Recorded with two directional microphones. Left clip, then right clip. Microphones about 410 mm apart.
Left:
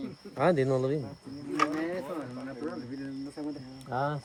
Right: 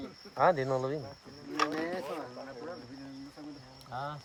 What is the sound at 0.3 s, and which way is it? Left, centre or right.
Speech, centre.